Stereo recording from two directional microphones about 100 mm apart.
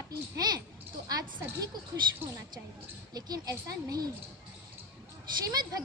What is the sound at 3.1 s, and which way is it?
Speech, 35° right (ahead or behind).